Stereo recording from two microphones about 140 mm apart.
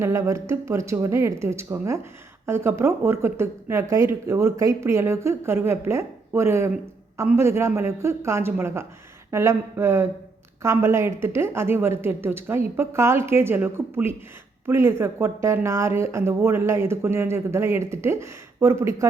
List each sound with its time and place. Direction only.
0.0 s a woman's voice: 20° right (ahead or behind)